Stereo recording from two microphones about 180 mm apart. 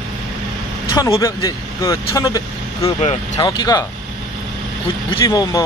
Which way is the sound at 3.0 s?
40° left (ahead or behind).